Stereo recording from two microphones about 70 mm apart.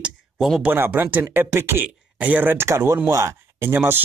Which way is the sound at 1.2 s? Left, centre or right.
Right.